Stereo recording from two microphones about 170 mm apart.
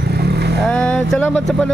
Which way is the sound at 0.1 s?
70° right (ahead or behind).